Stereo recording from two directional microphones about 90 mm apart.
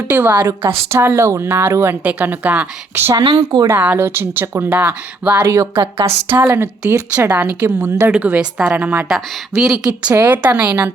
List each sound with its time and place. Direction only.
0.1 s speech: 20° right (ahead or behind)
3.2 s speech: 50° right (ahead or behind)
3.7 s speech: 20° right (ahead or behind)
5.4 s speech: 35° right (ahead or behind)
5.7 s speech: 85° right
6.3 s speech: 25° right (ahead or behind)
7.8 s speech: 35° right (ahead or behind)
8.1 s a woman's voice: 20° right (ahead or behind)
9.0 s speech: centre (ahead or behind)
10.1 s speech: 20° right (ahead or behind)